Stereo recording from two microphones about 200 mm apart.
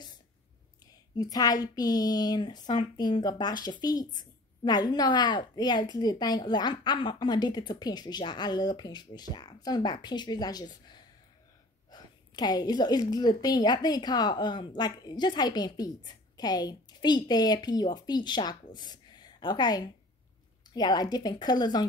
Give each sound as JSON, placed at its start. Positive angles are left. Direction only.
{"t": 1.1, "sound": "a woman's voice", "side_deg": 20}